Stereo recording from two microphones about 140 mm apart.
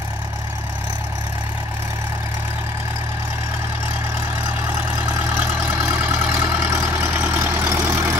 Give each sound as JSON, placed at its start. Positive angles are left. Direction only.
{"t": 5.4, "sound": "vehicle", "side_deg": -15}